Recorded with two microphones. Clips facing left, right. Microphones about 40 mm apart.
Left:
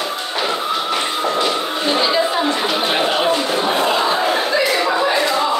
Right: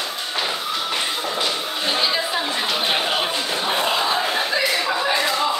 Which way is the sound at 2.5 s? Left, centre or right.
Centre.